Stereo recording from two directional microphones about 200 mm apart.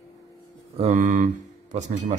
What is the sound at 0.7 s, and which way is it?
Speech, 35° right (ahead or behind).